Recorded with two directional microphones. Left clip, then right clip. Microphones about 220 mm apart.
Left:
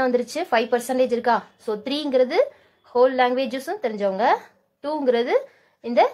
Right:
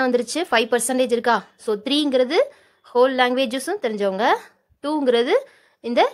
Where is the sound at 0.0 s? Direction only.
35° right (ahead or behind).